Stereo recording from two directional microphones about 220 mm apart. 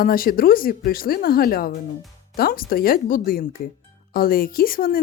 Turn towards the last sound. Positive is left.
turn(degrees=40)  # may be behind; listen again after turning